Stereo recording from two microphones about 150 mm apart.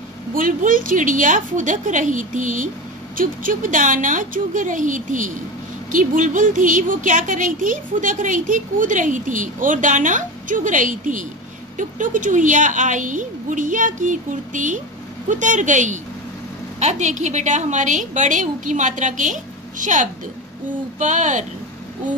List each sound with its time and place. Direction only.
0.3 s a woman's voice: 65° right (ahead or behind)